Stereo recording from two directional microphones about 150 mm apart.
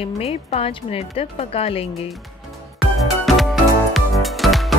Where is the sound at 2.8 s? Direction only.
Centre (ahead or behind).